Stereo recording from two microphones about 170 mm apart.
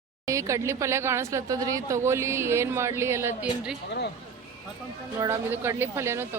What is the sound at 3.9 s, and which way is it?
Speech, 85° left.